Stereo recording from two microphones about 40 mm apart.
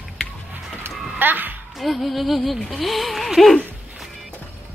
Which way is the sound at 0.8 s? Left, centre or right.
Right.